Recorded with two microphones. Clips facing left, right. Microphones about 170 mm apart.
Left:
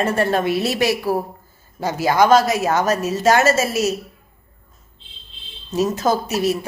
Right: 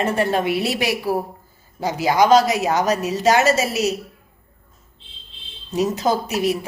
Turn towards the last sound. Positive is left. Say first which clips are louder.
# left 1 dB
turn(degrees=-15)  # may be behind; listen again after turning